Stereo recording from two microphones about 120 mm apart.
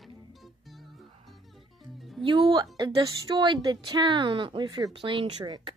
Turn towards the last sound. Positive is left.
turn(degrees=-45)  # may be behind; listen again after turning